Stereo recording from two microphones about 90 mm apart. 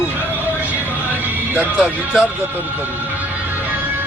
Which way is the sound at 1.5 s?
15° right (ahead or behind).